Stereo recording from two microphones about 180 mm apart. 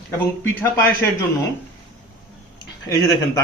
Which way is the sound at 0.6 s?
10° left (ahead or behind).